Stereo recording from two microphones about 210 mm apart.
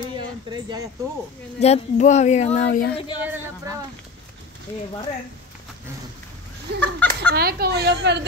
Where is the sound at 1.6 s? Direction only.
30° left (ahead or behind).